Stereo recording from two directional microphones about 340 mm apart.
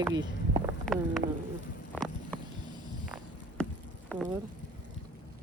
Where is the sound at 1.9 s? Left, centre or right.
Centre.